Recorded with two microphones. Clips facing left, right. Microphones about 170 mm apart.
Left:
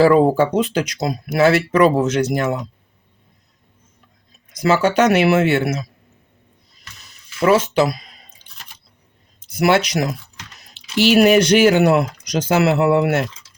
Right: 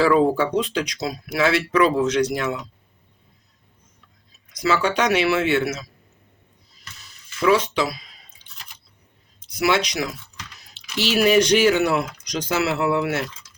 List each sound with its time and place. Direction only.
0.1 s speech: 50° left (ahead or behind)
4.6 s speech: 50° left (ahead or behind)
7.4 s speech: 50° left (ahead or behind)
9.5 s speech: 55° left (ahead or behind)
10.9 s speech: 60° left (ahead or behind)